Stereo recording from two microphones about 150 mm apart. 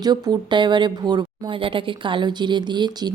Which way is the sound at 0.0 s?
25° right (ahead or behind).